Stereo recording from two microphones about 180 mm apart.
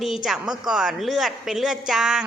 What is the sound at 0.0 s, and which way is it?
Speech, centre (ahead or behind).